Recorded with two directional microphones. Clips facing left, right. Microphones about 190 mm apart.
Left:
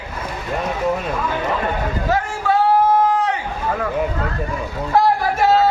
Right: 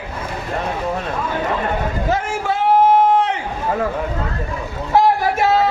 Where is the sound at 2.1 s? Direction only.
25° right (ahead or behind).